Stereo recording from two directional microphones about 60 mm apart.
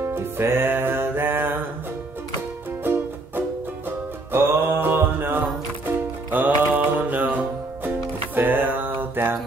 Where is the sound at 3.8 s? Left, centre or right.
Right.